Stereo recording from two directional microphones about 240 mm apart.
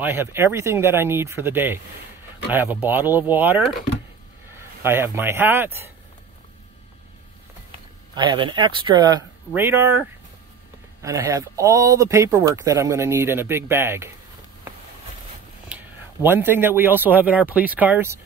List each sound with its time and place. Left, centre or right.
0.0 s speech: centre
8.1 s speech: centre
15.7 s a man's voice: centre